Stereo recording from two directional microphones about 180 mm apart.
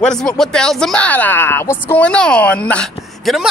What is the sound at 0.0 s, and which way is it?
A woman's voice, 5° left (ahead or behind).